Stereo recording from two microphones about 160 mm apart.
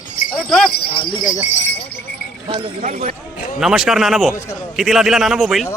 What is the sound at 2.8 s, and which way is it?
Speech, 50° right (ahead or behind).